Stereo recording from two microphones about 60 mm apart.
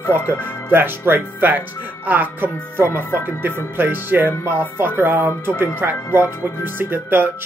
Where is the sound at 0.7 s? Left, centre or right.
Right.